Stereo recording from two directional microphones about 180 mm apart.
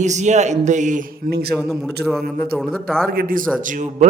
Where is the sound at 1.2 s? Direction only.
60° right (ahead or behind).